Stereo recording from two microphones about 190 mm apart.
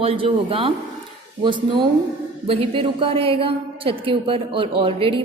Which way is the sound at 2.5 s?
30° right (ahead or behind).